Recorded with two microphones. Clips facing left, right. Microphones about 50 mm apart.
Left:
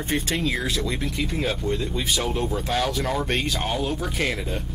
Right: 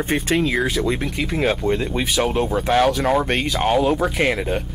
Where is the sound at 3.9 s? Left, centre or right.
Right.